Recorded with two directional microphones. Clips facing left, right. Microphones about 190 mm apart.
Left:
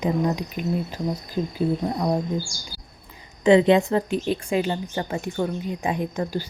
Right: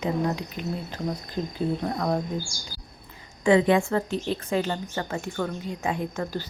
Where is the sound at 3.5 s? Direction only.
20° left (ahead or behind).